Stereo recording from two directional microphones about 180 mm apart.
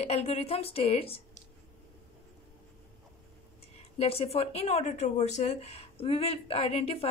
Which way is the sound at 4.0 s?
35° left (ahead or behind).